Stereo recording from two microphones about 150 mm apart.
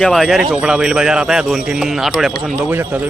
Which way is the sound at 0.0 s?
Centre (ahead or behind).